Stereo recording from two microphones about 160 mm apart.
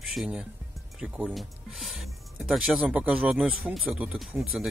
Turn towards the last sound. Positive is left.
turn(degrees=0)  # may be behind; listen again after turning